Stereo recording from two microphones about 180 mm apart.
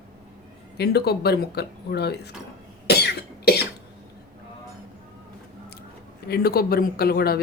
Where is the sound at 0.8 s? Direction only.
65° left (ahead or behind).